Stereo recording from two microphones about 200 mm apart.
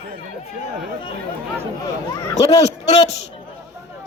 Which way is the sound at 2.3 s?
35° left (ahead or behind).